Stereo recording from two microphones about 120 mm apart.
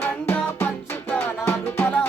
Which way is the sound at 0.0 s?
20° left (ahead or behind).